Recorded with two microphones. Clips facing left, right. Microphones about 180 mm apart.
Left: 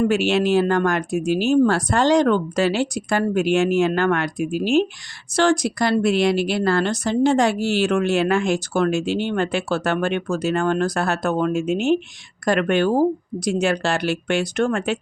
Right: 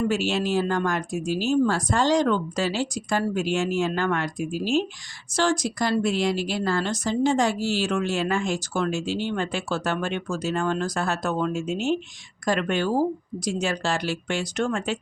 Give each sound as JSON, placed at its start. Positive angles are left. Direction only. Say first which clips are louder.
{"t": 0.1, "sound": "speech", "louder": "left 6 dB", "side_deg": 65}